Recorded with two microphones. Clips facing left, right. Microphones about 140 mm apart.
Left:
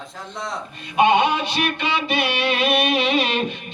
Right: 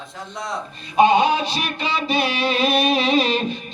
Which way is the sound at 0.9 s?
35° right (ahead or behind).